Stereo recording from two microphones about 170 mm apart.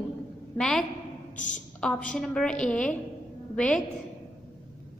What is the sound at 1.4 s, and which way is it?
Speech, 50° left (ahead or behind).